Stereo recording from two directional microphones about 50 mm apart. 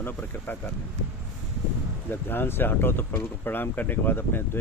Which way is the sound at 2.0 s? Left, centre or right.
Left.